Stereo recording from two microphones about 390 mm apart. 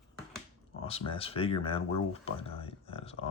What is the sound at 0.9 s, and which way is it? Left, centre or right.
Speech, centre.